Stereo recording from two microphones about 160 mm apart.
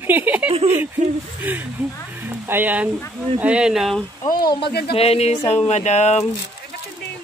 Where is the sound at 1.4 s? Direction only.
10° right (ahead or behind).